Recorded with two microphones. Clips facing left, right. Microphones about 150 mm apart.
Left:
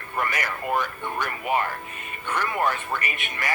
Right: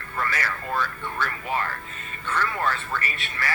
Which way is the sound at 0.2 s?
15° left (ahead or behind).